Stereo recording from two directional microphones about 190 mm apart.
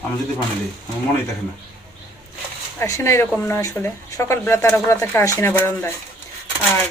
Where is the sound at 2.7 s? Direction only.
15° left (ahead or behind).